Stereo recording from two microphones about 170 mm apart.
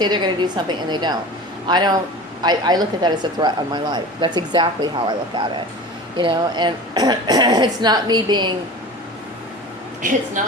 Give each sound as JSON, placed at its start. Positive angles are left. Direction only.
{"t": 0.0, "sound": "speech", "side_deg": -25}
{"t": 10.0, "sound": "a woman's voice", "side_deg": -50}